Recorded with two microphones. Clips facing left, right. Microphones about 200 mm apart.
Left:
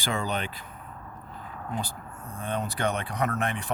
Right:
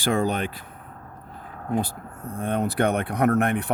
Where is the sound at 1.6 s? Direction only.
55° right (ahead or behind).